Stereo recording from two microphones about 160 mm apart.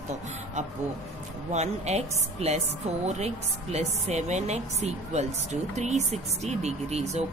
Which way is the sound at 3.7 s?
45° right (ahead or behind).